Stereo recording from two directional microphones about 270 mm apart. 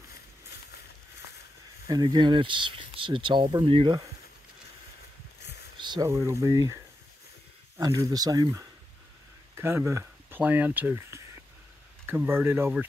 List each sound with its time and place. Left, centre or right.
1.9 s speech: centre
5.4 s a sound: left
5.8 s speech: centre